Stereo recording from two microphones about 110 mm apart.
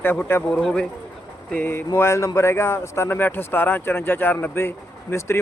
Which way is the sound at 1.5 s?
20° left (ahead or behind).